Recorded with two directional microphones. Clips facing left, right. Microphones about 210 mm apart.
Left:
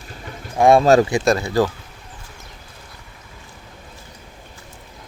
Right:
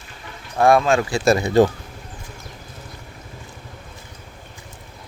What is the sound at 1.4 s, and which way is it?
Speech, 20° right (ahead or behind).